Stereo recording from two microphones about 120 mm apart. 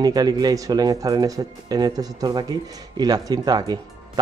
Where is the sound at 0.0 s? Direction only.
35° right (ahead or behind).